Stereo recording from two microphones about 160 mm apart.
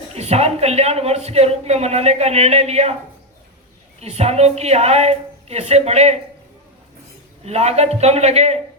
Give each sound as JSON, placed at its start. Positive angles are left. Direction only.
{"t": 0.2, "sound": "a man's voice", "side_deg": -40}
{"t": 4.0, "sound": "a man's voice", "side_deg": -40}
{"t": 7.4, "sound": "a man's voice", "side_deg": -40}